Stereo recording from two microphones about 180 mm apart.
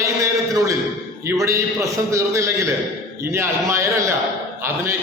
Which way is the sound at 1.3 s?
15° right (ahead or behind).